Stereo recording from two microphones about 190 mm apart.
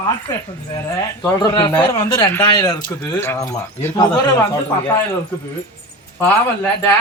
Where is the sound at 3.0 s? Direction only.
10° left (ahead or behind).